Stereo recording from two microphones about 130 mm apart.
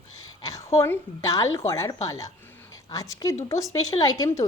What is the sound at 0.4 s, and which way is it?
A woman's voice, 25° left (ahead or behind).